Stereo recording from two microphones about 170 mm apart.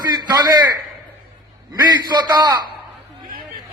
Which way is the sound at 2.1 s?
25° right (ahead or behind).